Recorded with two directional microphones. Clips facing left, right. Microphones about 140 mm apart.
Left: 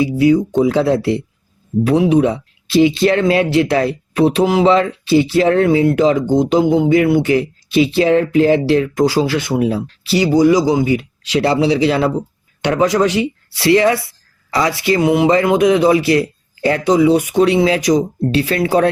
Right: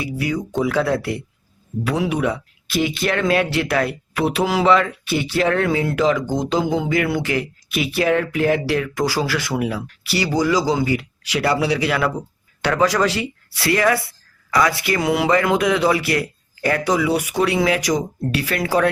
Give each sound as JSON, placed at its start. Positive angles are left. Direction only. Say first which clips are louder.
{"t": 0.0, "sound": "speech", "louder": "left 11 dB", "side_deg": 25}